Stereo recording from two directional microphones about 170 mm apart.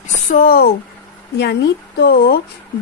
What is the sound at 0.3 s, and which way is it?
Speech, 55° left (ahead or behind).